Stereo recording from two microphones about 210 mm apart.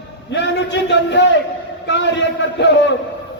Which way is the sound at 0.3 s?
55° left (ahead or behind).